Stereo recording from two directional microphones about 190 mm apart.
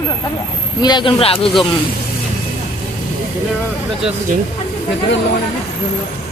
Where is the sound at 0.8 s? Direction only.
25° left (ahead or behind).